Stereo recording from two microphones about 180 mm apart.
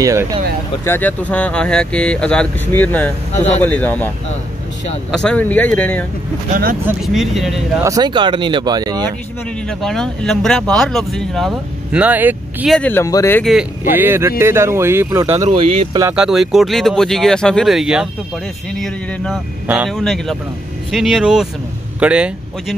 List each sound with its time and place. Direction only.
0.0 s speech: 15° right (ahead or behind)
0.8 s speech: 10° left (ahead or behind)
5.1 s speech: 5° left (ahead or behind)
6.5 s speech: 50° right (ahead or behind)
7.0 s speech: centre (ahead or behind)
7.8 s speech: 20° right (ahead or behind)
9.7 s speech: 5° left (ahead or behind)
12.7 s speech: 10° left (ahead or behind)
13.4 s speech: 5° right (ahead or behind); by 15.4 s 20° right (ahead or behind)
15.4 s speech: 35° right (ahead or behind)
16.0 s speech: 10° right (ahead or behind)